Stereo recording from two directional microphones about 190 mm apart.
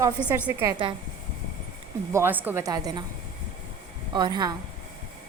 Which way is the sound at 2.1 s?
10° right (ahead or behind).